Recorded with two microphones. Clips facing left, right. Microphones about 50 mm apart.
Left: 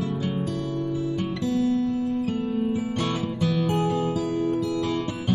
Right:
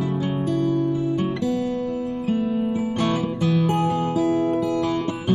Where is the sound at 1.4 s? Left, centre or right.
Centre.